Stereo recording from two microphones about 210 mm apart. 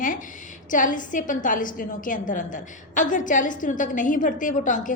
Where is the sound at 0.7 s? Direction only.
40° left (ahead or behind).